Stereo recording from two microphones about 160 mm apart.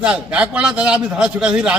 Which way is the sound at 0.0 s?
5° right (ahead or behind).